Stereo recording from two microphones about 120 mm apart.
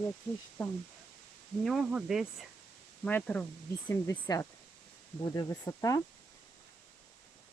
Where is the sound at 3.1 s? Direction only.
10° left (ahead or behind).